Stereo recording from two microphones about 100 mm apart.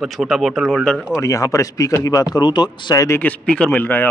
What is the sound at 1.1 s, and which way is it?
Speech, 30° left (ahead or behind).